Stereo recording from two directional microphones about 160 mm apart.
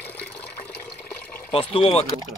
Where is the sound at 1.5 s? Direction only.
35° left (ahead or behind).